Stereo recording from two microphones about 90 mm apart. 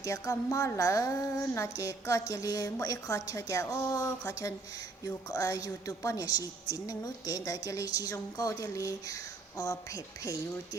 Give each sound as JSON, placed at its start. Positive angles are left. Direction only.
{"t": 0.0, "sound": "a woman's voice", "side_deg": 40}